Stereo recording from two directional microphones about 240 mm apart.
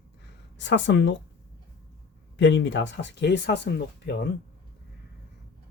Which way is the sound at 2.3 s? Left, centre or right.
Left.